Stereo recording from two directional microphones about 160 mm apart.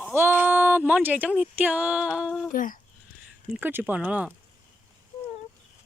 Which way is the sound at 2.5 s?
55° left (ahead or behind).